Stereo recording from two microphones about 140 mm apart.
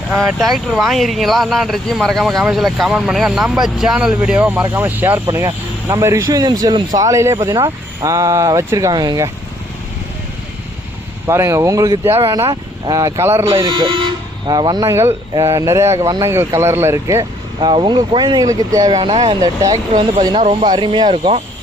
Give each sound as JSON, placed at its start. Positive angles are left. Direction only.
{"t": 0.3, "sound": "speech", "side_deg": 0}
{"t": 11.3, "sound": "speech", "side_deg": -20}
{"t": 13.6, "sound": "speech", "side_deg": -35}
{"t": 17.6, "sound": "speech", "side_deg": -35}
{"t": 18.9, "sound": "speech", "side_deg": -40}
{"t": 19.4, "sound": "speech", "side_deg": -25}